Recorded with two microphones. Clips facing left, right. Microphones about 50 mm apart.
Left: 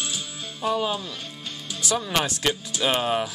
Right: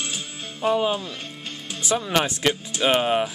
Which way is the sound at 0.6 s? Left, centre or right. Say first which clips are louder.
Right 3 dB; right.